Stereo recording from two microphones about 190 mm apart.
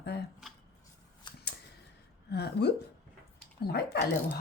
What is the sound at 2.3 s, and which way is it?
Speech, 60° left (ahead or behind).